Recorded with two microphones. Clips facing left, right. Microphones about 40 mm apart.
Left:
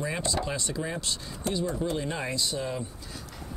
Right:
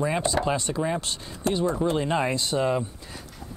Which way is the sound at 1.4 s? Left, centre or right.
Right.